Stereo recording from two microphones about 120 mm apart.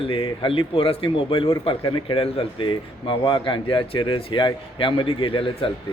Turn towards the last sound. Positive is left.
turn(degrees=45)  # may be behind; listen again after turning